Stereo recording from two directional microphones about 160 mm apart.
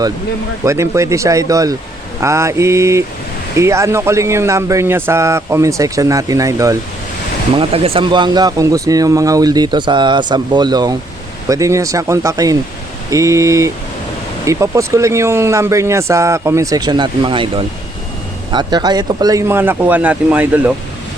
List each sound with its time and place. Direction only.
0.6 s speech: 20° right (ahead or behind)
7.6 s speech: 35° right (ahead or behind); by 20.7 s 10° right (ahead or behind)